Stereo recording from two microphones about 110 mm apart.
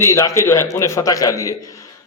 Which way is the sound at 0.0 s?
30° left (ahead or behind).